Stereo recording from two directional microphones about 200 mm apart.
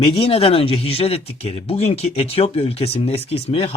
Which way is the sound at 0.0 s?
30° left (ahead or behind).